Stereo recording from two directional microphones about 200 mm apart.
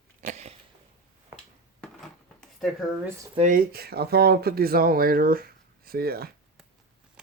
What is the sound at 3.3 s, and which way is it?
Speech, 40° right (ahead or behind).